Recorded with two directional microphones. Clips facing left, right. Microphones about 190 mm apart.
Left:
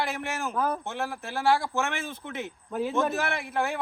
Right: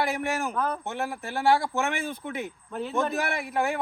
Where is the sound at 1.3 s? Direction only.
15° right (ahead or behind).